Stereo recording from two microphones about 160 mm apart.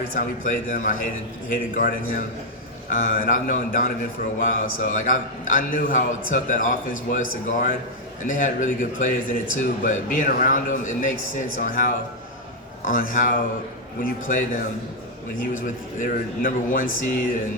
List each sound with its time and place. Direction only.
0.1 s a man's voice: 60° left (ahead or behind)